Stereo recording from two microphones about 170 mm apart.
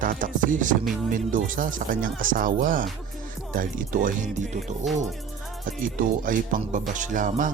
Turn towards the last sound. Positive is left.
turn(degrees=-50)  # may be behind; listen again after turning